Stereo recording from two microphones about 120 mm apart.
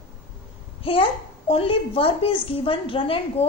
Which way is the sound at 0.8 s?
50° left (ahead or behind).